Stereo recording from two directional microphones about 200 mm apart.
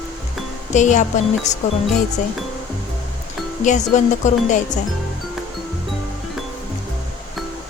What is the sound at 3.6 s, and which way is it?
Speech, 35° left (ahead or behind).